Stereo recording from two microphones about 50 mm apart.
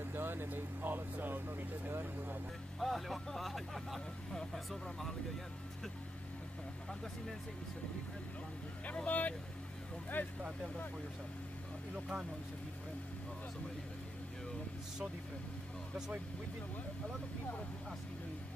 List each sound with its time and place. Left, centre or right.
0.0 s speech: right
2.8 s speech: centre
4.3 s speech: centre
8.8 s speech: left
10.1 s speech: left
11.9 s speech: centre